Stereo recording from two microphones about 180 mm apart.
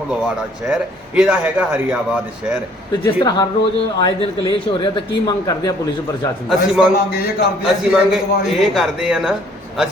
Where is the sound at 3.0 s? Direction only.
25° left (ahead or behind).